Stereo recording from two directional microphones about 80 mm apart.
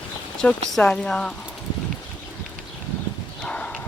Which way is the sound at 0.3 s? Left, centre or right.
Centre.